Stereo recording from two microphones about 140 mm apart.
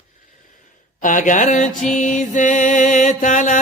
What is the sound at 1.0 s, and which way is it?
Mantra, 65° left (ahead or behind).